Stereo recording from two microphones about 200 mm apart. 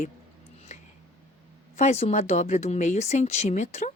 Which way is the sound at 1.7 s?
35° left (ahead or behind).